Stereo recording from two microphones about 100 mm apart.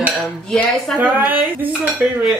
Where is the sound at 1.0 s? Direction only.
15° right (ahead or behind).